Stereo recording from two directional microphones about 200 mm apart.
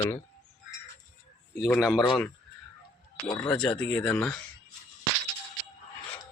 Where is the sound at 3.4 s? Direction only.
5° left (ahead or behind).